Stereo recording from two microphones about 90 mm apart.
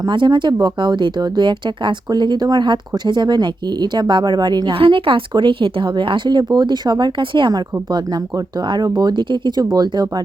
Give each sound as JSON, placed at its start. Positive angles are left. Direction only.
{"t": 0.0, "sound": "speech", "side_deg": -55}
{"t": 4.7, "sound": "speech", "side_deg": -80}
{"t": 8.6, "sound": "speech", "side_deg": -55}
{"t": 9.7, "sound": "speech", "side_deg": -50}